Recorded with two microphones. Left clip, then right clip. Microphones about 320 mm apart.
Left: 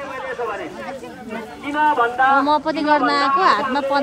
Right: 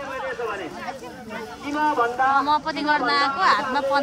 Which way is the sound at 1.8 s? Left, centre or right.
Left.